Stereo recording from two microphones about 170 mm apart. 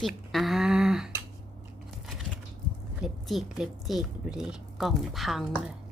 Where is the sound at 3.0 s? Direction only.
Centre (ahead or behind).